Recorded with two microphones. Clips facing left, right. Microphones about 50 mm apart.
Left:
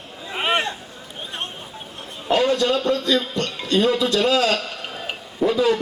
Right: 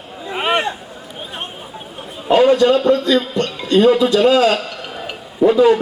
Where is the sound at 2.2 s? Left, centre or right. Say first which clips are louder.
Right 7 dB; centre.